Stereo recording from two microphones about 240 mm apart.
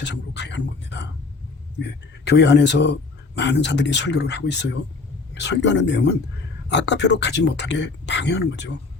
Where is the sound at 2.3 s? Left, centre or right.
Left.